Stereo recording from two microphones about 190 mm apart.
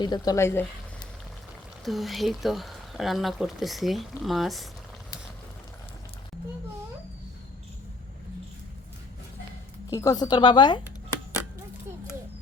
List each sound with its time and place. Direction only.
0.0 s speech: 20° left (ahead or behind)
1.8 s speech: centre (ahead or behind)
9.9 s a woman's voice: 20° left (ahead or behind)